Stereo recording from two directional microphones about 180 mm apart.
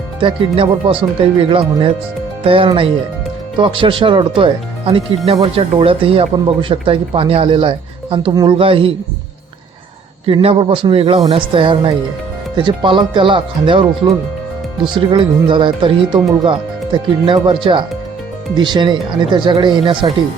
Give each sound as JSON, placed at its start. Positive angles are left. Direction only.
{"t": 0.2, "sound": "speech", "side_deg": -30}
{"t": 10.2, "sound": "speech", "side_deg": -30}